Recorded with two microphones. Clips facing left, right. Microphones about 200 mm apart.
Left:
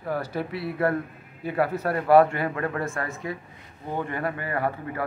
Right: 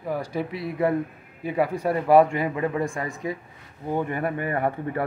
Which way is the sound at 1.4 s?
15° right (ahead or behind).